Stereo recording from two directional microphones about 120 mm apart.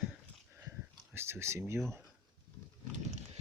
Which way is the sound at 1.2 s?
20° right (ahead or behind).